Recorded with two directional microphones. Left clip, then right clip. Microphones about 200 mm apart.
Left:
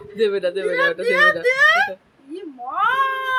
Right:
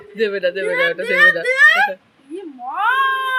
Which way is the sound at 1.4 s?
35° left (ahead or behind).